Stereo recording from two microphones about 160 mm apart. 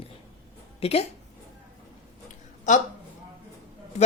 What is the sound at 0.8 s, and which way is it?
Speech, 40° left (ahead or behind).